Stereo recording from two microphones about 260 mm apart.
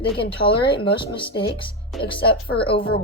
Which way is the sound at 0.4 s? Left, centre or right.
Left.